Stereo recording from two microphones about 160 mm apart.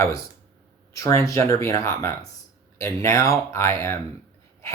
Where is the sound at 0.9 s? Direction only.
20° left (ahead or behind).